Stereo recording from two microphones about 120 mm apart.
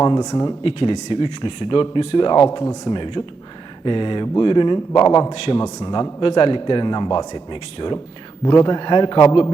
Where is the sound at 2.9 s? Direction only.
45° left (ahead or behind).